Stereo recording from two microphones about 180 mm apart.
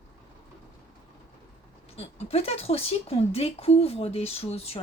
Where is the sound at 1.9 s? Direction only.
35° left (ahead or behind).